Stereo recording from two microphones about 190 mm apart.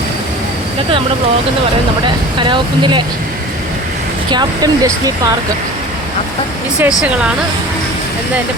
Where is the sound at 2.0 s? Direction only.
25° right (ahead or behind).